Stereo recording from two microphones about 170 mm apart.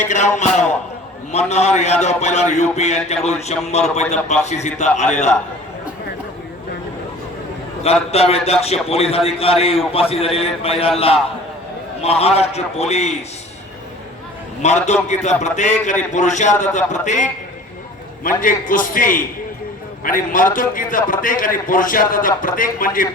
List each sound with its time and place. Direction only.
0.0 s a man's voice: 45° left (ahead or behind)
8.1 s a man's voice: 35° left (ahead or behind)
14.6 s a man's voice: 40° left (ahead or behind)
18.4 s a man's voice: 50° left (ahead or behind)